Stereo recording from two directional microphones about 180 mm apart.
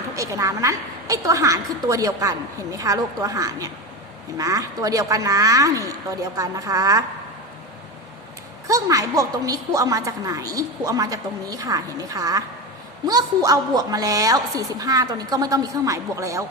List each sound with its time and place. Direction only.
0.2 s a woman's voice: 15° right (ahead or behind)
8.6 s a woman's voice: 20° right (ahead or behind)